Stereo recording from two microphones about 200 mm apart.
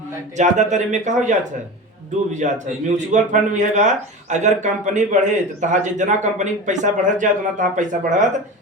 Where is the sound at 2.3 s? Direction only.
35° right (ahead or behind).